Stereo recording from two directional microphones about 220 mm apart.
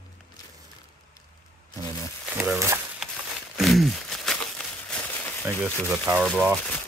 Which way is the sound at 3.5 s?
Centre (ahead or behind).